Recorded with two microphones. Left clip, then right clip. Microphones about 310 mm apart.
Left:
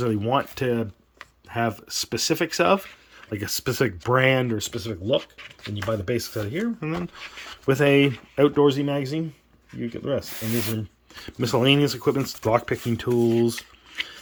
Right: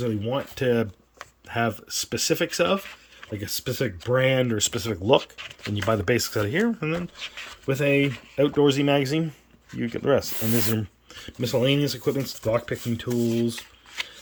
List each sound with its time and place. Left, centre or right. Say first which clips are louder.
0.0 s speech: left 4 dB; centre
5.2 s speech: right 3 dB; right
5.7 s speech: right 3 dB; centre
7.7 s speech: left 4 dB; centre
11.1 s speech: left 2 dB; centre